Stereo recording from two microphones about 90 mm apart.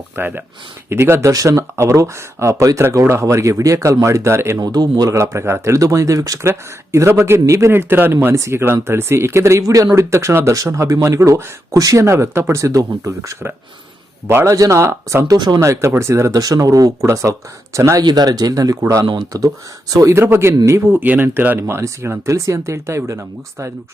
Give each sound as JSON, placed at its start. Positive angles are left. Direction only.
{"t": 0.2, "sound": "speech", "side_deg": -20}
{"t": 1.3, "sound": "speech", "side_deg": -40}
{"t": 4.6, "sound": "speech", "side_deg": -50}
{"t": 5.1, "sound": "speech", "side_deg": -30}
{"t": 14.5, "sound": "speech", "side_deg": -35}
{"t": 15.4, "sound": "speech", "side_deg": -55}
{"t": 15.6, "sound": "speech", "side_deg": -35}
{"t": 18.0, "sound": "speech", "side_deg": -45}
{"t": 20.9, "sound": "speech", "side_deg": -20}